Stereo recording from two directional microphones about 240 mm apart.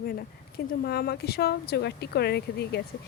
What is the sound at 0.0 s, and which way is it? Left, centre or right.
A woman's voice, left.